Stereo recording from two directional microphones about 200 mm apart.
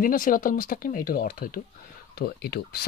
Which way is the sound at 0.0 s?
45° left (ahead or behind).